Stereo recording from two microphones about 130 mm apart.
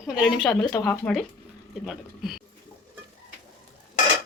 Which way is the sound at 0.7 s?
30° left (ahead or behind).